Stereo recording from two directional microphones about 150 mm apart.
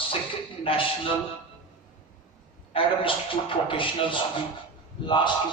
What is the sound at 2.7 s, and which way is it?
A man's voice, 35° left (ahead or behind).